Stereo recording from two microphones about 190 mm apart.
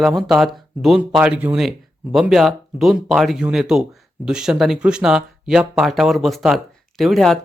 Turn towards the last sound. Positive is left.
turn(degrees=0)  # may be behind; listen again after turning